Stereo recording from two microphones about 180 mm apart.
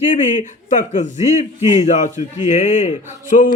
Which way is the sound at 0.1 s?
40° left (ahead or behind).